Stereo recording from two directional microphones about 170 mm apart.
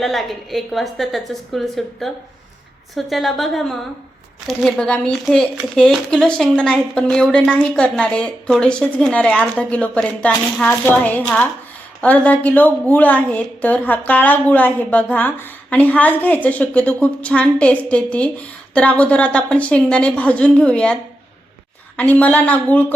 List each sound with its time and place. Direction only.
0.0 s a woman's voice: centre (ahead or behind)